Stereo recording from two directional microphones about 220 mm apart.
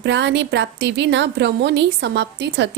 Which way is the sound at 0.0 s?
55° right (ahead or behind).